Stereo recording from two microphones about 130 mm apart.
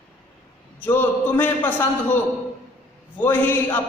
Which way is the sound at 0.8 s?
15° left (ahead or behind).